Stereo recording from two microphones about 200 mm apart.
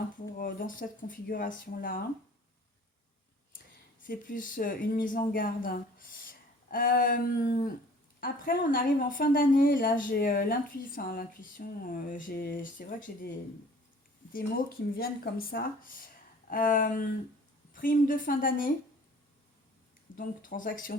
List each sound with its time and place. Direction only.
0.3 s speech: 45° left (ahead or behind)
4.0 s speech: 45° left (ahead or behind)
14.9 s speech: 50° left (ahead or behind)
20.1 s speech: 45° left (ahead or behind)